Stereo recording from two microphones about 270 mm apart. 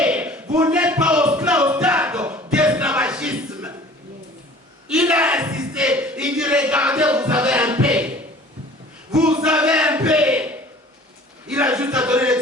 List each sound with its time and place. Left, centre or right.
0.0 s a sound: centre
4.9 s speech: centre
9.1 s a man's voice: centre